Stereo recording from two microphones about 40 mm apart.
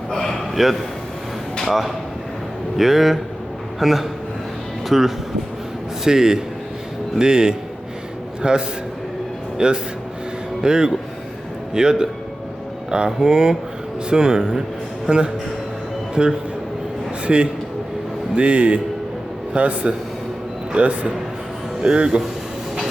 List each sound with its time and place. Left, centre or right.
0.1 s a sound: centre
1.6 s a man's voice: centre
13.1 s a man's voice: centre